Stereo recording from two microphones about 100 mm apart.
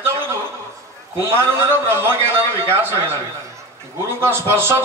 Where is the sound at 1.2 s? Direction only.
25° right (ahead or behind).